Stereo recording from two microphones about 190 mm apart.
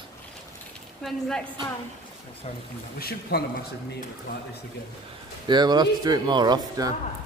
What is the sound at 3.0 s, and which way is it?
Speech, 55° left (ahead or behind).